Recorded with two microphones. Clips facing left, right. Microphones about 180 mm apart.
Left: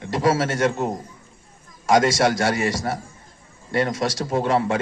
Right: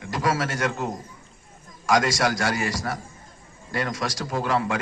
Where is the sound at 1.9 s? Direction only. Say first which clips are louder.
Left 4 dB; 25° left (ahead or behind).